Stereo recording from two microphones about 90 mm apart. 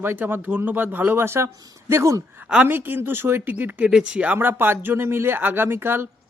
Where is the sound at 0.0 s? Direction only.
25° right (ahead or behind).